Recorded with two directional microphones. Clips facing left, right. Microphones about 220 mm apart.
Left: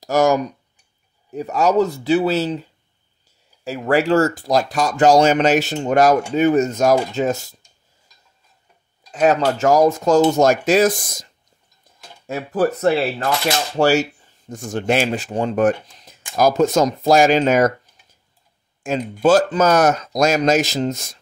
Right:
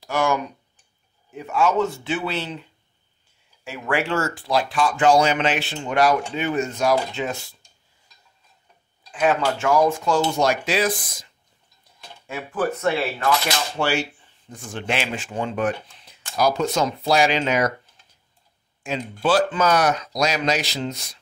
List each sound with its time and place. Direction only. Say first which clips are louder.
0.0 s speech: left 6 dB; 40° left (ahead or behind)
9.1 s speech: left 4 dB; 40° left (ahead or behind)
18.0 s dishes: left 2 dB; 15° left (ahead or behind)
18.8 s speech: left 6 dB; 45° left (ahead or behind)